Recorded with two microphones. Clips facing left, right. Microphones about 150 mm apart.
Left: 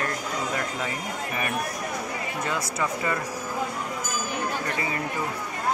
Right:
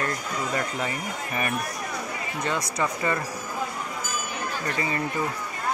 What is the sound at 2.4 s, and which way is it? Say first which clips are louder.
Speech: right 2 dB; 5° left (ahead or behind).